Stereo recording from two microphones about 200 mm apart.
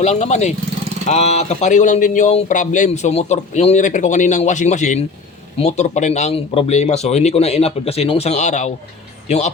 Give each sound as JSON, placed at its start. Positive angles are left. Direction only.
{"t": 0.0, "sound": "speech", "side_deg": 35}